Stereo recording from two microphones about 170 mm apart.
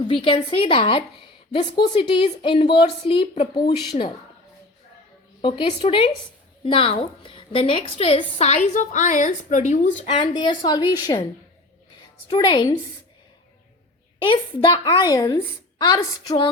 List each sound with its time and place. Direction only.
0.1 s a woman's voice: 30° left (ahead or behind)
5.4 s a woman's voice: 30° left (ahead or behind); by 10.1 s 45° left (ahead or behind)
10.2 s a woman's voice: 25° left (ahead or behind)
12.3 s a woman's voice: 25° left (ahead or behind)
14.3 s a woman's voice: 25° left (ahead or behind)